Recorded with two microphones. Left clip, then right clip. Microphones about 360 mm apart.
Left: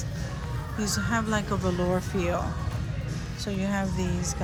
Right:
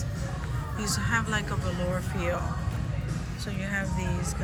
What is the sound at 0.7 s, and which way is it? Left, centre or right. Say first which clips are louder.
Speech: even; centre.